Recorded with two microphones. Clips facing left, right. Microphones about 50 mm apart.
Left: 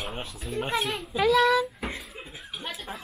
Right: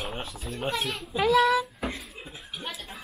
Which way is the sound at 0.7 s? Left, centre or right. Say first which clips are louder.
Left 3 dB; centre.